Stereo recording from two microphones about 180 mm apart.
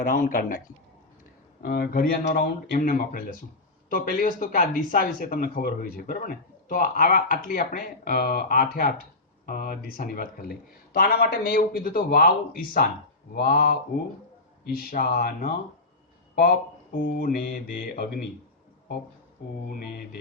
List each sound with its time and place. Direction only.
0.0 s speech: 50° left (ahead or behind)
1.6 s speech: 55° left (ahead or behind)
14.8 s speech: 55° left (ahead or behind)
16.3 s a sound: 55° left (ahead or behind)
17.2 s speech: 50° left (ahead or behind)